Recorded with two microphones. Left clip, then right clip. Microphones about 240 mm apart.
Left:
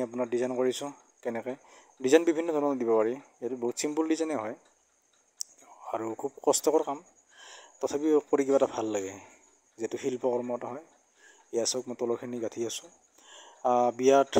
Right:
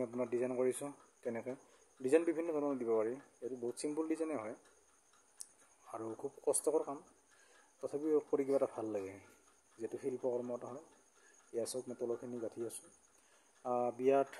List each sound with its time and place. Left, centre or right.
0.0 s speech: centre
5.9 s speech: left